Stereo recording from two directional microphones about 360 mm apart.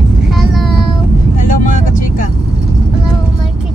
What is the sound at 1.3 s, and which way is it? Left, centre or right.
Vehicle, left.